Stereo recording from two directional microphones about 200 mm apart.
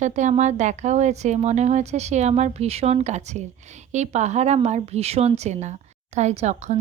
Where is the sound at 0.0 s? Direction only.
35° right (ahead or behind).